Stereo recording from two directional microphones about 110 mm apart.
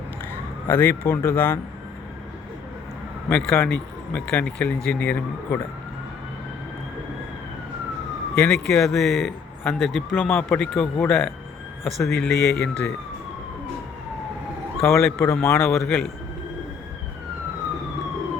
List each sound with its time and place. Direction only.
0.7 s speech: 15° left (ahead or behind)
3.2 s speech: 10° left (ahead or behind)
8.4 s speech: 5° left (ahead or behind)
10.2 s speech: 15° left (ahead or behind)
10.8 s speech: 5° left (ahead or behind)
14.8 s a man's voice: 25° left (ahead or behind)
15.9 s speech: 5° left (ahead or behind)